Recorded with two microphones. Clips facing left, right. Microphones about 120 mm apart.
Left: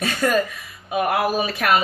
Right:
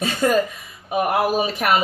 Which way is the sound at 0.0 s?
25° right (ahead or behind).